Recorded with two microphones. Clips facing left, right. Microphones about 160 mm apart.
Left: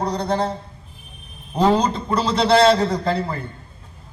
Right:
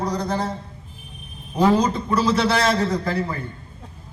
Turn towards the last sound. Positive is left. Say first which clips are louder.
# left 2 dB
turn(degrees=30)  # may be behind; listen again after turning